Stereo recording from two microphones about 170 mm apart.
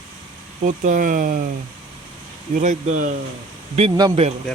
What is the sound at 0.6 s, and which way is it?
Speech, 50° right (ahead or behind).